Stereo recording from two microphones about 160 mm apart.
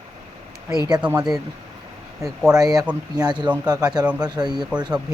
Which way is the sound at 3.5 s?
25° right (ahead or behind).